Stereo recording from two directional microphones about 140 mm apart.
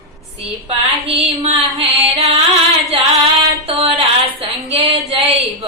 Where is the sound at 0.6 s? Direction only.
45° right (ahead or behind).